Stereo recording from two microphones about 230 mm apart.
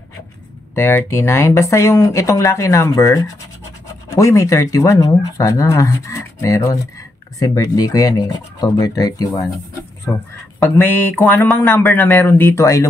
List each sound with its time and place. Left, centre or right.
0.7 s speech: centre
10.8 s speech: centre